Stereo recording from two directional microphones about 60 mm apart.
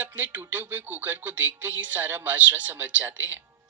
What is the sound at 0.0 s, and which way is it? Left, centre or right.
Music, right.